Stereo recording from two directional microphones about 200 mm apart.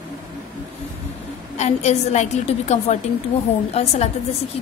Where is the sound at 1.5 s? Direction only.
35° left (ahead or behind).